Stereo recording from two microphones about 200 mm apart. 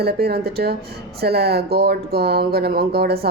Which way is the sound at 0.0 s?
50° right (ahead or behind).